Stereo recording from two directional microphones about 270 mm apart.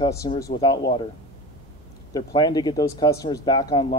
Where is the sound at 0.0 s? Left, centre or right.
Centre.